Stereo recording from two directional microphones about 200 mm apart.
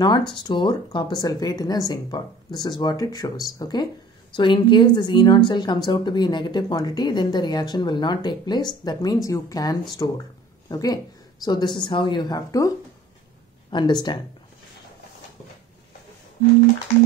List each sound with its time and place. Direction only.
0.4 s speech: 20° left (ahead or behind)